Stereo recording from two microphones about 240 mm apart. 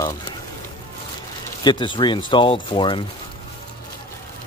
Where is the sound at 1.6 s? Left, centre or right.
Centre.